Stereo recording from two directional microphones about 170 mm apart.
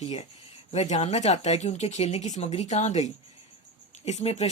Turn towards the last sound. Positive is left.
turn(degrees=40)  # may be behind; listen again after turning